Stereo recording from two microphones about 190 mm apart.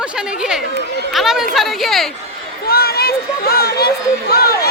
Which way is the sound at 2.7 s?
55° left (ahead or behind).